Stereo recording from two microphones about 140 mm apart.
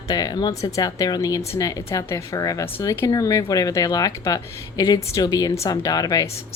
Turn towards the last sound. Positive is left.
turn(degrees=25)  # may be behind; listen again after turning